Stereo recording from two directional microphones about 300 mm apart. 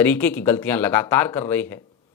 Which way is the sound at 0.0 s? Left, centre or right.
Centre.